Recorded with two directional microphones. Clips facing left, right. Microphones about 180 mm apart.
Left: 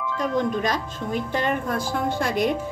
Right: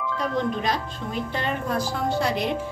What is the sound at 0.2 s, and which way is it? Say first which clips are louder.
Speech: left 3 dB; 45° left (ahead or behind).